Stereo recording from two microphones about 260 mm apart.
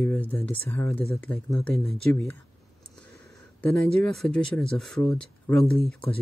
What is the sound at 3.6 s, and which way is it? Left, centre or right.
Speech, centre.